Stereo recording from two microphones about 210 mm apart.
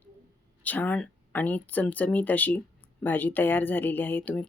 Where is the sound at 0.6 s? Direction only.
10° left (ahead or behind).